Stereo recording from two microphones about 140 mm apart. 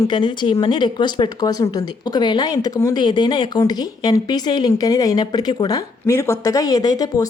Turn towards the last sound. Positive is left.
turn(degrees=25)  # may be behind; listen again after turning